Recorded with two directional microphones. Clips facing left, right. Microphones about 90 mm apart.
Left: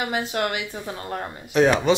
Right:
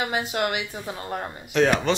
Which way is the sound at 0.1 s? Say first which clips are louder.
Even; 15° right (ahead or behind).